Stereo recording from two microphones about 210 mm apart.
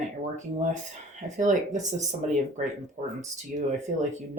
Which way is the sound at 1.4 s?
35° right (ahead or behind).